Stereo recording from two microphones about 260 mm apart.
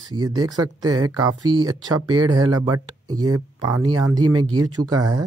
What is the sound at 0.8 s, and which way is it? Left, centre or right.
Speech, right.